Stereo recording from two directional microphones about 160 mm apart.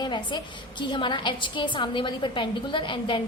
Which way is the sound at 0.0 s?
30° left (ahead or behind).